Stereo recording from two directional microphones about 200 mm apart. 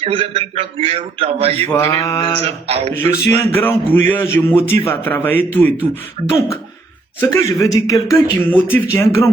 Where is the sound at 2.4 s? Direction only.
30° right (ahead or behind).